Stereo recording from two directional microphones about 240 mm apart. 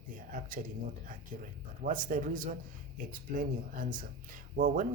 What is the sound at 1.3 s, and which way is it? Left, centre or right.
Speech, right.